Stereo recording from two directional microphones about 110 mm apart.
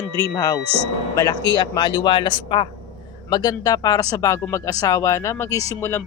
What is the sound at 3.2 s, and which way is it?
Speech, 35° left (ahead or behind).